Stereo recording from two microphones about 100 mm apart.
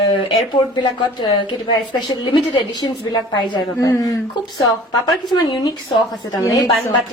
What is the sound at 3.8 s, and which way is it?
Speech, 30° left (ahead or behind).